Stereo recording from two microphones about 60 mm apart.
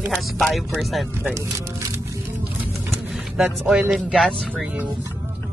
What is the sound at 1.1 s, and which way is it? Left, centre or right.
Speech, right.